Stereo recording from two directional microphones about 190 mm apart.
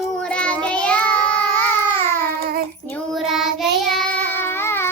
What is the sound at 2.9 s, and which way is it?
Child singing, 5° left (ahead or behind).